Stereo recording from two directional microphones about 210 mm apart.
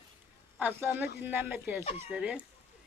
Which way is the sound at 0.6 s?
10° right (ahead or behind).